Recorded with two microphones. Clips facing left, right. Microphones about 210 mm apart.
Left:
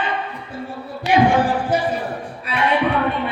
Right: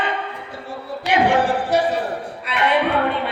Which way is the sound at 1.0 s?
70° right (ahead or behind).